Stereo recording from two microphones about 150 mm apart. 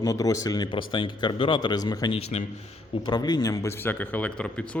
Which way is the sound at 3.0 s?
30° left (ahead or behind).